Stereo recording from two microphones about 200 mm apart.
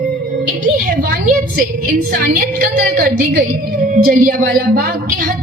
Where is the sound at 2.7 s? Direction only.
45° right (ahead or behind).